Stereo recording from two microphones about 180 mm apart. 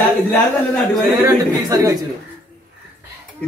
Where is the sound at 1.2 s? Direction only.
20° right (ahead or behind).